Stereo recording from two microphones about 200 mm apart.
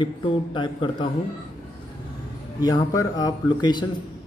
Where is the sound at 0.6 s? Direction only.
25° left (ahead or behind).